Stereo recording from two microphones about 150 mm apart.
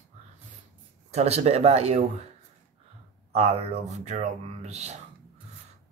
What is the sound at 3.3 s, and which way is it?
Speech, 45° right (ahead or behind).